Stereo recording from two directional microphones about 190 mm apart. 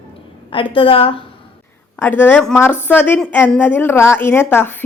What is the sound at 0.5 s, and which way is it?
Speech, 30° left (ahead or behind).